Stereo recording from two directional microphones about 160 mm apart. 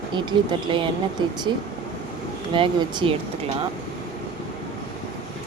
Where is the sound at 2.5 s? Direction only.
30° right (ahead or behind).